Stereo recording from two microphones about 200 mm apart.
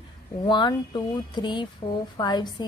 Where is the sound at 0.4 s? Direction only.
20° left (ahead or behind).